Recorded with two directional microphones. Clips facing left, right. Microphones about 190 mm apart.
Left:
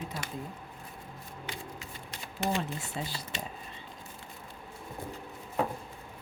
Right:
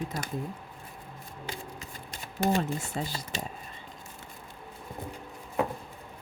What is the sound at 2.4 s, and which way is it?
Speech, 45° right (ahead or behind).